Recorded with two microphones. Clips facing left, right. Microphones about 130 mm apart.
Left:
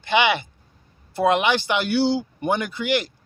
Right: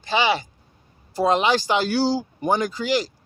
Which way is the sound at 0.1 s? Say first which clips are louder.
Left 1 dB; 35° right (ahead or behind).